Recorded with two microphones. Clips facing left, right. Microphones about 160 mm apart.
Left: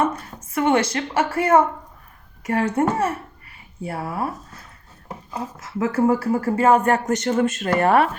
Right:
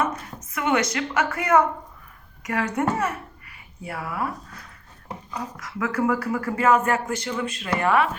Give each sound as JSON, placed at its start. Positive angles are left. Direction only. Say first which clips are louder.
{"t": 0.5, "sound": "a woman's voice", "louder": "left 4 dB", "side_deg": 30}